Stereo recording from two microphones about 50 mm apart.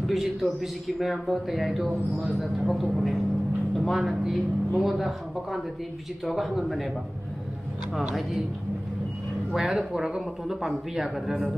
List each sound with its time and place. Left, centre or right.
0.0 s speech: centre
2.1 s speech: right
2.6 s speech: centre
9.6 s speech: centre